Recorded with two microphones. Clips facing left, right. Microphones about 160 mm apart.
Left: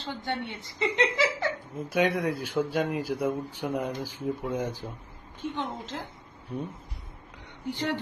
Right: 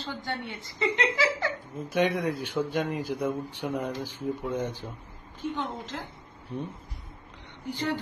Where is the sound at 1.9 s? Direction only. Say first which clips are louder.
Even; 10° left (ahead or behind).